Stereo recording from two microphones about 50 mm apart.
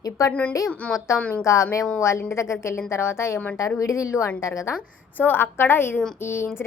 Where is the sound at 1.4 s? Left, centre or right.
Left.